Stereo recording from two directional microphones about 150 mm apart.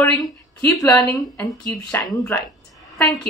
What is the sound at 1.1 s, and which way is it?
Speech, centre (ahead or behind).